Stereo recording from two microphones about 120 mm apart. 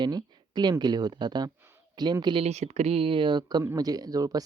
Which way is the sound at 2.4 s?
65° right (ahead or behind).